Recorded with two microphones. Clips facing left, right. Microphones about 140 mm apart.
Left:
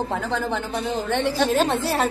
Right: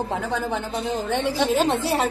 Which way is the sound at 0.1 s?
10° right (ahead or behind).